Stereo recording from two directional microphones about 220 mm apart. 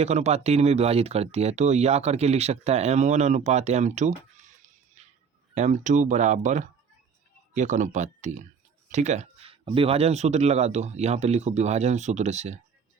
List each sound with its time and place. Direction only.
0.0 s speech: 30° right (ahead or behind)
5.0 s a sound: 30° right (ahead or behind)
5.5 s speech: 35° right (ahead or behind)